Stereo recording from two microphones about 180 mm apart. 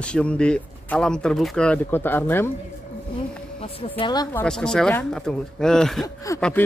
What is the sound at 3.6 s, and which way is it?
Speech, 30° left (ahead or behind).